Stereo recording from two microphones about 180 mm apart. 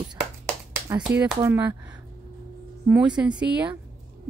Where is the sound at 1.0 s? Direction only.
10° right (ahead or behind).